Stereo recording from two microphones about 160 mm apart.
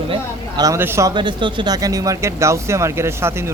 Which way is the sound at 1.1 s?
30° right (ahead or behind).